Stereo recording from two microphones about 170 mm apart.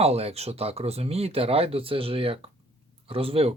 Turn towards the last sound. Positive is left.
turn(degrees=-35)  # may be behind; listen again after turning